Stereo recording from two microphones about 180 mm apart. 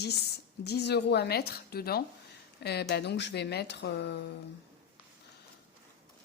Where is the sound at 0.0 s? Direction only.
65° left (ahead or behind).